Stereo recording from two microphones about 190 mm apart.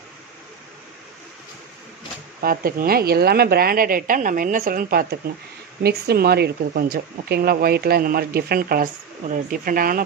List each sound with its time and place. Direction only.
2.4 s speech: 50° right (ahead or behind)